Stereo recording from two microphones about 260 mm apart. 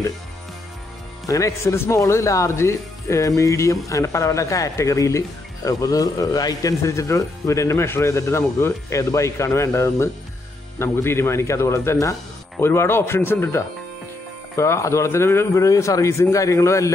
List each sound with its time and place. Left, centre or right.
1.2 s speech: centre